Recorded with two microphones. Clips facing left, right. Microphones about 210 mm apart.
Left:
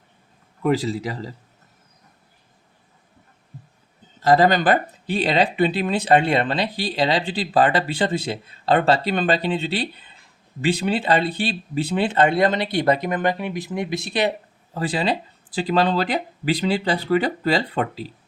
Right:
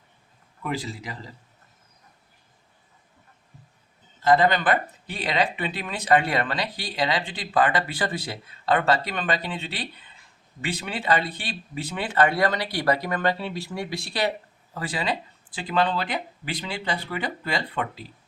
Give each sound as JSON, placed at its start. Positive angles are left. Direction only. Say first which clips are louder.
{"t": 0.6, "sound": "speech", "louder": "left 10 dB", "side_deg": 40}
{"t": 4.2, "sound": "speech", "louder": "left 3 dB", "side_deg": 40}